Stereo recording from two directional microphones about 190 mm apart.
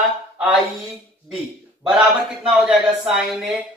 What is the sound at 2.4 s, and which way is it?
Speech, centre (ahead or behind).